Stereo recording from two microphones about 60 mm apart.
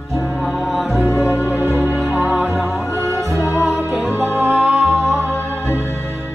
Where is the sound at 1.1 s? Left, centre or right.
Left.